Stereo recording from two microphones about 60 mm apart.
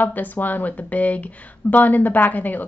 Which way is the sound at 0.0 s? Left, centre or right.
Left.